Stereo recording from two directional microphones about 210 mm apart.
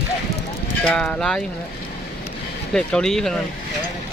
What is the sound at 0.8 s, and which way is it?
Speech, 5° left (ahead or behind).